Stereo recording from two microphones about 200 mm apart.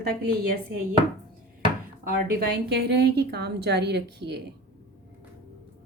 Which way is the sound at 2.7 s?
55° right (ahead or behind).